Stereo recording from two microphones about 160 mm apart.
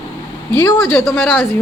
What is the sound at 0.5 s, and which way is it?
Speech, 20° left (ahead or behind).